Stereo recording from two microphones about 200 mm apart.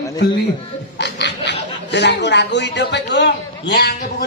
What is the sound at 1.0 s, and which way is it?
Speech, 60° left (ahead or behind).